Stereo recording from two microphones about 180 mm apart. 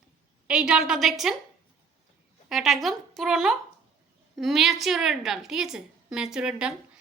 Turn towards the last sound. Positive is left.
turn(degrees=-5)  # may be behind; listen again after turning